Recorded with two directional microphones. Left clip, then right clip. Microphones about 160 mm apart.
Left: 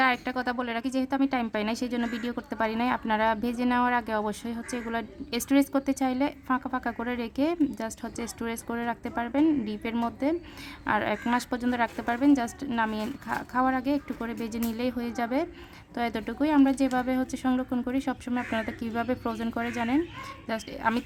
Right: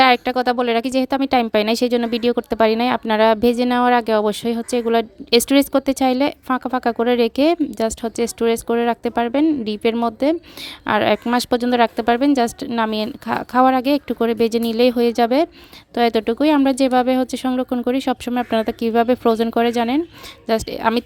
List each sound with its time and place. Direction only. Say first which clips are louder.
0.0 s a woman's voice: right 11 dB; 45° right (ahead or behind)